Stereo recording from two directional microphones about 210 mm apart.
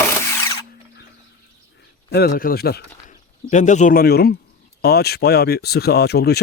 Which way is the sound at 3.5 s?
35° left (ahead or behind).